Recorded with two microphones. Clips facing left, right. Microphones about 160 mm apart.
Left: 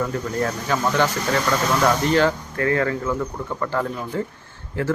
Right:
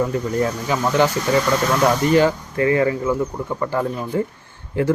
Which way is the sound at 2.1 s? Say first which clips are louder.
Right 3 dB; 10° right (ahead or behind).